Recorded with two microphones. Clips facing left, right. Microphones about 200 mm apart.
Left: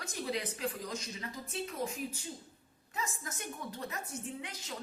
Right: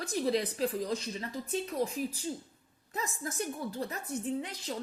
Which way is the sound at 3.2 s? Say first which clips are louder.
Right 7 dB; 35° right (ahead or behind).